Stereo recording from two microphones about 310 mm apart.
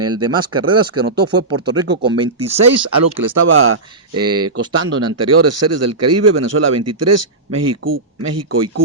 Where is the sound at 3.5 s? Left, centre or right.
Right.